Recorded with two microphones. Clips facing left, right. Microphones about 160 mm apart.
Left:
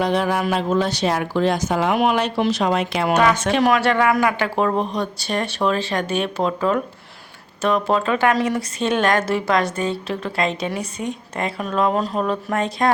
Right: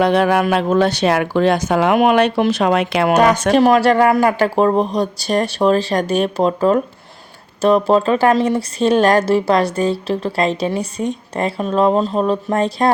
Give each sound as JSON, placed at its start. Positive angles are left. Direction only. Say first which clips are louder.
{"t": 0.0, "sound": "speech", "louder": "right 6 dB", "side_deg": -65}
{"t": 3.2, "sound": "a woman's voice", "louder": "right 5 dB", "side_deg": -40}